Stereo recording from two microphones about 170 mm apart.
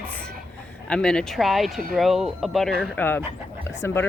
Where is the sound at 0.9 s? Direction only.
5° left (ahead or behind).